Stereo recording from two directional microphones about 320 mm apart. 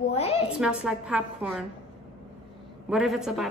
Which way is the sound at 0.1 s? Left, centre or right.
Centre.